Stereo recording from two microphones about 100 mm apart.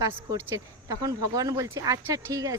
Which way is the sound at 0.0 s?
35° right (ahead or behind).